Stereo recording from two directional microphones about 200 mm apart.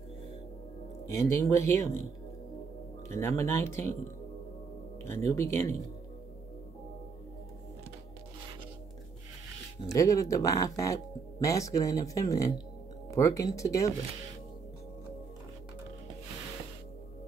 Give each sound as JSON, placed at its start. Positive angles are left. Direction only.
{"t": 1.1, "sound": "speech", "side_deg": 15}
{"t": 3.2, "sound": "speech", "side_deg": 15}
{"t": 5.0, "sound": "speech", "side_deg": 15}
{"t": 9.9, "sound": "speech", "side_deg": 15}